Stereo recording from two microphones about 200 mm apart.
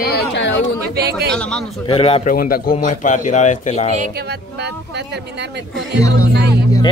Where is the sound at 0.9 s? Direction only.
55° right (ahead or behind).